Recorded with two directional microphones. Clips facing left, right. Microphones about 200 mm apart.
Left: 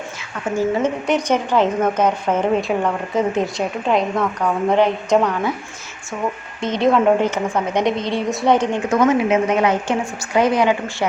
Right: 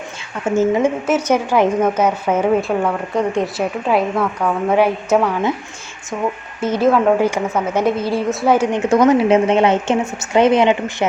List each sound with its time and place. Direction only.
0.5 s a woman's voice: 15° right (ahead or behind)
1.0 s a woman's voice: 5° right (ahead or behind)
6.6 s a woman's voice: 5° right (ahead or behind)
8.8 s a woman's voice: 35° right (ahead or behind)